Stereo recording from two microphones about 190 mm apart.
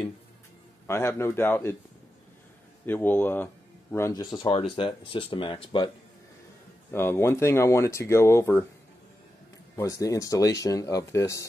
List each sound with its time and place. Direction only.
0.8 s speech: 15° left (ahead or behind)
2.9 s speech: 10° left (ahead or behind); by 5.9 s 25° left (ahead or behind)
6.9 s speech: 15° left (ahead or behind)
9.8 s speech: 15° left (ahead or behind)